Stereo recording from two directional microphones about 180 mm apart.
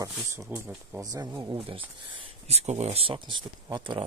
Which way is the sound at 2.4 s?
35° right (ahead or behind).